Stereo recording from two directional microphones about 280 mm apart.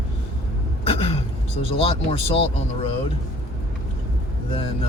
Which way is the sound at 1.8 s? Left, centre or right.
Centre.